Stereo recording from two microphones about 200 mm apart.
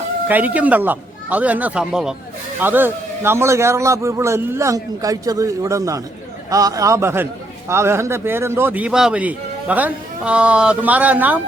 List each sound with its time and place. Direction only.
0.3 s a man's voice: 10° right (ahead or behind)